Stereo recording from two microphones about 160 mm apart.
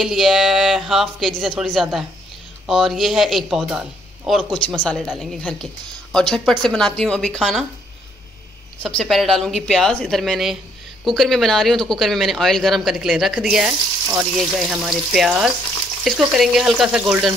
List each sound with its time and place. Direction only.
0.0 s speech: centre (ahead or behind)
8.7 s speech: 5° left (ahead or behind)